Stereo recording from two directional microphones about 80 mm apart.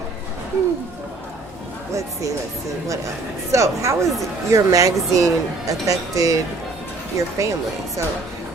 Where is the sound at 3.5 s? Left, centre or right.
Right.